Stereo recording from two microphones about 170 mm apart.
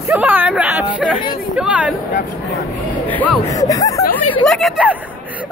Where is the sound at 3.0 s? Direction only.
10° left (ahead or behind).